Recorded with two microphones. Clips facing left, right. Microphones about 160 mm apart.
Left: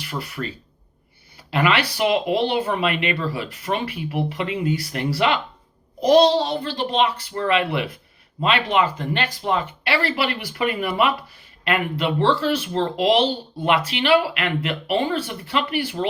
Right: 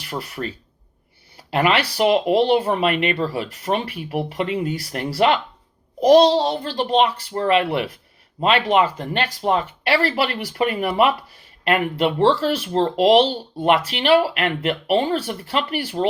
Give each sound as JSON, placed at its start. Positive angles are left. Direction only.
{"t": 0.4, "sound": "speech", "side_deg": -25}
{"t": 1.5, "sound": "speech", "side_deg": -35}